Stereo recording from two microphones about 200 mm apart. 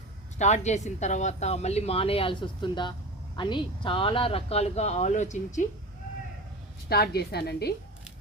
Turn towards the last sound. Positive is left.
turn(degrees=55)  # may be behind; listen again after turning